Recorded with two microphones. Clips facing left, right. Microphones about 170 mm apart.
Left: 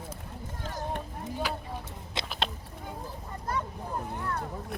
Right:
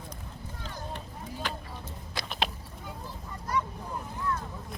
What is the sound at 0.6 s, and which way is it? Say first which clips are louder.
Run: left 5 dB; 50° left (ahead or behind).